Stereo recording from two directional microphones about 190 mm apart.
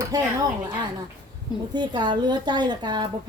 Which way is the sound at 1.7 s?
25° right (ahead or behind).